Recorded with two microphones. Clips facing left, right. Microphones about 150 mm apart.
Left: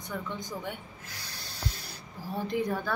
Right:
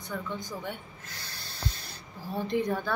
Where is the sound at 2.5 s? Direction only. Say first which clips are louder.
Right 2 dB; 10° left (ahead or behind).